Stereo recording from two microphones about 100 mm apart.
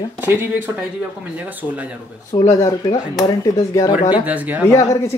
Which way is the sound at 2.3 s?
35° left (ahead or behind).